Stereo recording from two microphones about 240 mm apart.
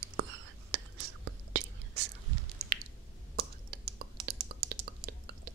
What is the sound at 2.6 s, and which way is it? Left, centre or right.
Squish, right.